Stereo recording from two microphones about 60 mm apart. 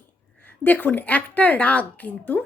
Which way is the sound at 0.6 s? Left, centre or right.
Left.